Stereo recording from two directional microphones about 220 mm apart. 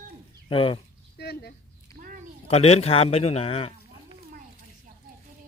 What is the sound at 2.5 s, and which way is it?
A man's voice, 30° left (ahead or behind).